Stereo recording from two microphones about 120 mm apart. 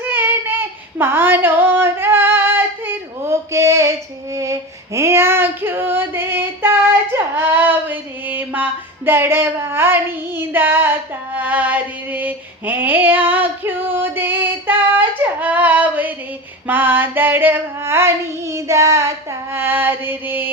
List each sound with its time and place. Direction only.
0.0 s child singing: 15° right (ahead or behind)
4.4 s female singing: 25° right (ahead or behind)